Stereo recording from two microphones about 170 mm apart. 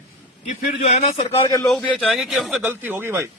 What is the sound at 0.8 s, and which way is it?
Speech, 35° left (ahead or behind).